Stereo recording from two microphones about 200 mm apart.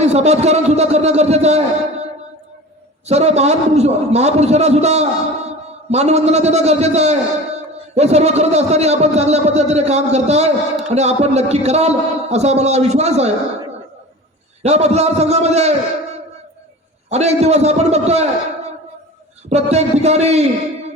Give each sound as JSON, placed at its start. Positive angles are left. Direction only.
{"t": 0.0, "sound": "a man's voice", "side_deg": -35}
{"t": 3.1, "sound": "a man's voice", "side_deg": -30}
{"t": 14.6, "sound": "a man's voice", "side_deg": -30}
{"t": 17.1, "sound": "a man's voice", "side_deg": -35}
{"t": 19.5, "sound": "a man's voice", "side_deg": -30}